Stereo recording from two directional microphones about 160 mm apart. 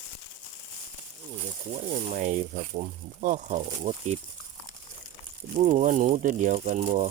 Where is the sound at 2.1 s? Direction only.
55° right (ahead or behind).